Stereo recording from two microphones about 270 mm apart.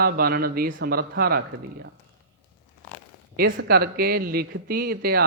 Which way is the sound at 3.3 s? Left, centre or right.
Right.